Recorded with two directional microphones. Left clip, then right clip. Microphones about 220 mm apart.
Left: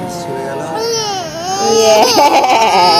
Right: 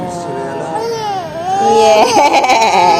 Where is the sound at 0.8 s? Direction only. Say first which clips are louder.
Left 2 dB; 15° left (ahead or behind).